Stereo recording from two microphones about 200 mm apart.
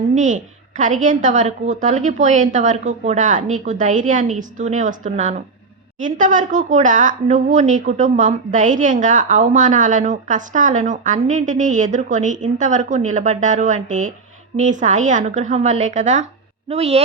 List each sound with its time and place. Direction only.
0.1 s a woman's voice: 40° right (ahead or behind)